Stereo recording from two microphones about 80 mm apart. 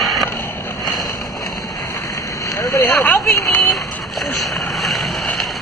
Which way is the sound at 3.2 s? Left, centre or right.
Left.